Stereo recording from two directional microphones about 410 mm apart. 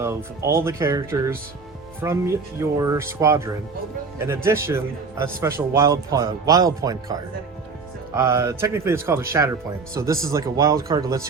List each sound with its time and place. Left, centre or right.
0.0 s speech: centre